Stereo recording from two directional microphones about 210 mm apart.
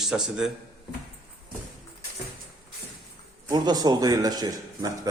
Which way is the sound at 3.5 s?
20° right (ahead or behind).